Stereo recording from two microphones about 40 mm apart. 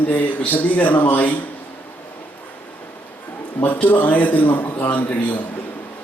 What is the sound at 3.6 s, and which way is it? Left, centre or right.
A man's voice, left.